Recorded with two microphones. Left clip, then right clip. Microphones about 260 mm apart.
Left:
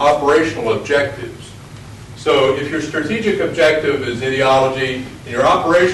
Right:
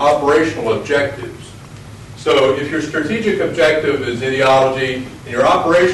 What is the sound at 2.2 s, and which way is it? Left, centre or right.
A man's voice, centre.